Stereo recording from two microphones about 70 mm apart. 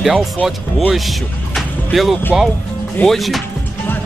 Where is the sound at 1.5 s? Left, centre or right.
Centre.